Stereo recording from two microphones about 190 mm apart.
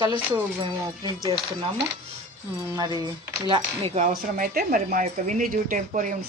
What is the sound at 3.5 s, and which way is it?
Speech, 30° right (ahead or behind).